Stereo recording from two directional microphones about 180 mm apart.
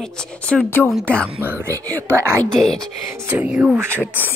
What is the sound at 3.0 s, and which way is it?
Speech, 15° right (ahead or behind).